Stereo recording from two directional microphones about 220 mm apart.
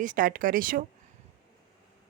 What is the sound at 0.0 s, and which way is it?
Speech, 35° right (ahead or behind).